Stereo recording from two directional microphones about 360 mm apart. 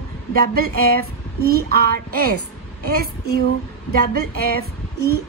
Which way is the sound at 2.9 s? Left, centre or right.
Right.